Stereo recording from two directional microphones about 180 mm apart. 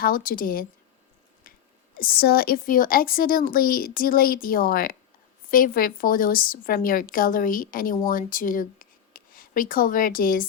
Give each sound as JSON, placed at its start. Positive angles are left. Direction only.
{"t": 0.0, "sound": "a woman's voice", "side_deg": 50}
{"t": 1.5, "sound": "a sound", "side_deg": 50}
{"t": 2.0, "sound": "a woman's voice", "side_deg": 55}